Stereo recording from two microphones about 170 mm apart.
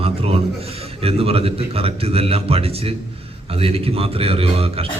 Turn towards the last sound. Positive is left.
turn(degrees=-35)  # may be behind; listen again after turning